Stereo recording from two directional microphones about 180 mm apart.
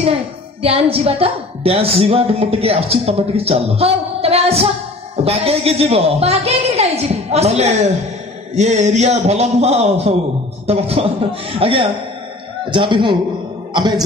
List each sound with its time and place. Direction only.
0.6 s a woman's voice: 30° right (ahead or behind)